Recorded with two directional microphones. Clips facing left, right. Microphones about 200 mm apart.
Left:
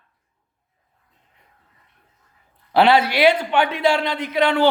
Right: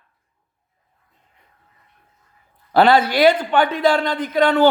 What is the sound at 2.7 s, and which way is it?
Speech, 5° left (ahead or behind).